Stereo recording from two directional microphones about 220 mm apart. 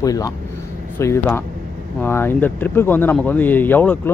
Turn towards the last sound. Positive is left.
turn(degrees=10)  # may be behind; listen again after turning